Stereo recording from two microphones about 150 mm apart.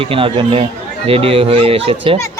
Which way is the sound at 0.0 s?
35° right (ahead or behind).